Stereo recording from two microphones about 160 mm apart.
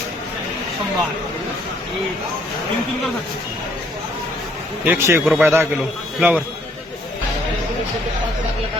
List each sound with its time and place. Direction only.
4.9 s speech: 15° right (ahead or behind)